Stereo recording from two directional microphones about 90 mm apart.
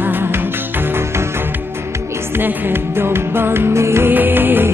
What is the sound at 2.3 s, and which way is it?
Music, 25° right (ahead or behind).